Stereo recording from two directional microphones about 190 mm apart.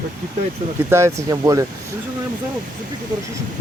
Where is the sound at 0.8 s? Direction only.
15° right (ahead or behind).